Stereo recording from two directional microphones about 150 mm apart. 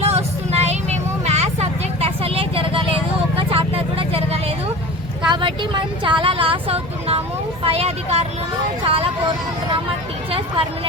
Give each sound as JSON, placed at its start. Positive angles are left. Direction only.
{"t": 0.0, "sound": "vehicle", "side_deg": -45}
{"t": 5.3, "sound": "speech", "side_deg": -35}